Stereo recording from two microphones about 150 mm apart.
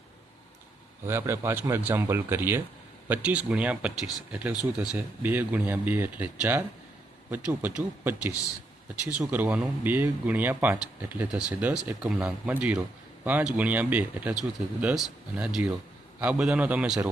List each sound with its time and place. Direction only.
1.0 s speech: 15° right (ahead or behind)